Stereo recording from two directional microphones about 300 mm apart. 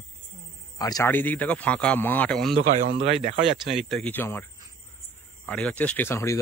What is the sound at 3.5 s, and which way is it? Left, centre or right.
Speech, centre.